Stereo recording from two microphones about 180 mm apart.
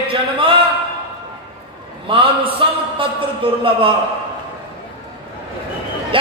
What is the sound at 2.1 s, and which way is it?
A man's voice, 30° right (ahead or behind).